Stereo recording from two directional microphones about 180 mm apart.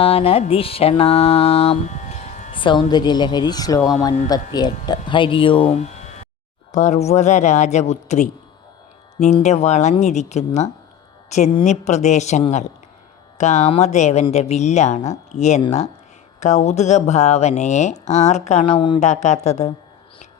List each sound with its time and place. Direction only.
0.0 s mantra: 30° left (ahead or behind)
2.6 s speech: 25° left (ahead or behind)
13.4 s speech: 40° left (ahead or behind)